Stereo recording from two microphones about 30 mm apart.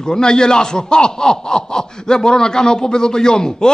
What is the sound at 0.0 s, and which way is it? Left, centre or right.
A man's voice, left.